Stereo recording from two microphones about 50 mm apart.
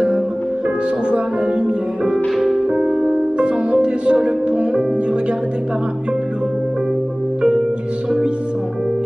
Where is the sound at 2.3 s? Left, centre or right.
Centre.